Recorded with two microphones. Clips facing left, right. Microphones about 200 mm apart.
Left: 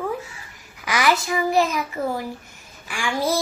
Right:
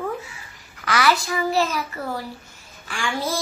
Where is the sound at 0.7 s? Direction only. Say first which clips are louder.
Even; 15° left (ahead or behind).